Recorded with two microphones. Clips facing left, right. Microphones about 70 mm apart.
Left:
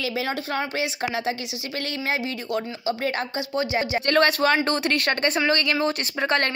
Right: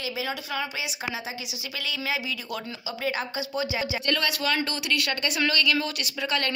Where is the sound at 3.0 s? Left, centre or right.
Left.